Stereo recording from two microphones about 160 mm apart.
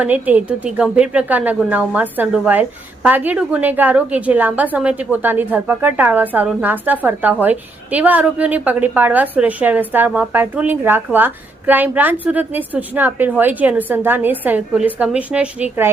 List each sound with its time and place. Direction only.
0.0 s a woman's voice: 10° right (ahead or behind)